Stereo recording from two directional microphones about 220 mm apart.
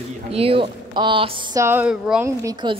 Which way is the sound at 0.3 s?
25° right (ahead or behind).